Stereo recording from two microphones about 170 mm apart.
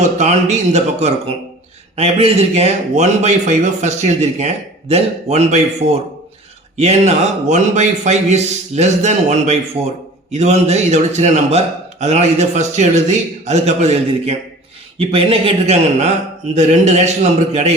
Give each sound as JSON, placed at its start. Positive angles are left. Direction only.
{"t": 0.2, "sound": "a man's voice", "side_deg": -45}